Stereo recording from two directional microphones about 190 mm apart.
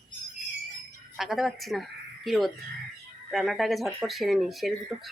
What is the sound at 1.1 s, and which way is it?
Speech, centre (ahead or behind).